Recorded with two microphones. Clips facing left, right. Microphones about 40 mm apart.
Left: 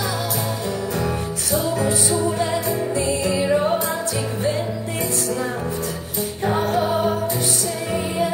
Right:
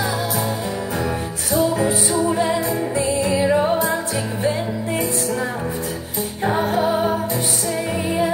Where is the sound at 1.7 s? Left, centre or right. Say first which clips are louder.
Right 1 dB; right.